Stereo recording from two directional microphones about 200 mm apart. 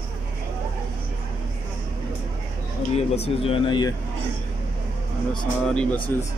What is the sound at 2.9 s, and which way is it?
Speech, 30° left (ahead or behind).